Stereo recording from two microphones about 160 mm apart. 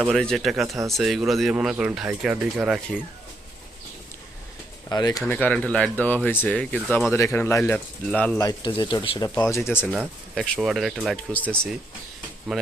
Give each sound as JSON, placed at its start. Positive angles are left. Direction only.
{"t": 0.0, "sound": "speech", "side_deg": 5}
{"t": 4.9, "sound": "speech", "side_deg": 25}
{"t": 5.2, "sound": "speech", "side_deg": 10}
{"t": 8.4, "sound": "speech", "side_deg": 25}
{"t": 10.3, "sound": "speech", "side_deg": 5}
{"t": 11.3, "sound": "speech", "side_deg": 10}